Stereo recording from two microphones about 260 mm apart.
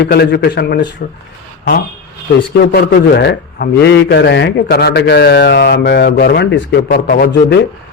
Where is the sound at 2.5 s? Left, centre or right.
Left.